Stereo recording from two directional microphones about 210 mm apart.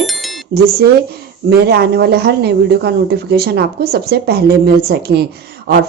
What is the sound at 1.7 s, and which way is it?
Speech, 50° right (ahead or behind).